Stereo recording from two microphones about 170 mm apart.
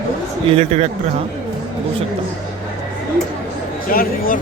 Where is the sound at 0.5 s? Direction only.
40° right (ahead or behind).